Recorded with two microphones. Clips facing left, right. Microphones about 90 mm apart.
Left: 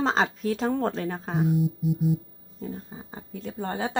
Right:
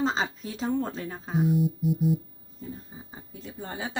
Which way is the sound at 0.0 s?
65° left (ahead or behind).